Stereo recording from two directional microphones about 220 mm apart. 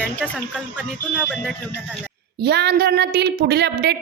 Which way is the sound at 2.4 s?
50° right (ahead or behind).